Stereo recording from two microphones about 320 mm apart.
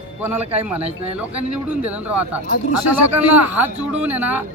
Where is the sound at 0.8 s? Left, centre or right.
Centre.